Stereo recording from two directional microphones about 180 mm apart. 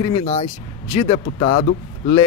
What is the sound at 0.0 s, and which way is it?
Speech, 30° left (ahead or behind).